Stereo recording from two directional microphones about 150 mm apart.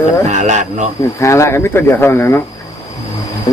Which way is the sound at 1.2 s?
20° left (ahead or behind).